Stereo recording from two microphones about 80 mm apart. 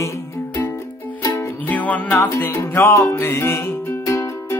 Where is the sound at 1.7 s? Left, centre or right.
Centre.